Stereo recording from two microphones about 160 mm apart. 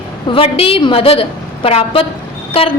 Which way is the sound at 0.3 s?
35° left (ahead or behind).